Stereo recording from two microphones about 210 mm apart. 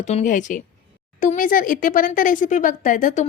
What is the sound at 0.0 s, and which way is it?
Speech, 35° left (ahead or behind).